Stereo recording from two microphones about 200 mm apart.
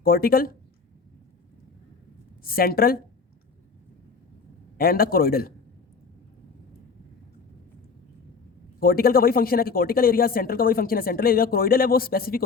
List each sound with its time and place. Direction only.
0.0 s speech: 50° left (ahead or behind)
2.4 s speech: 50° left (ahead or behind)
4.8 s speech: 50° left (ahead or behind)
8.8 s speech: 45° left (ahead or behind)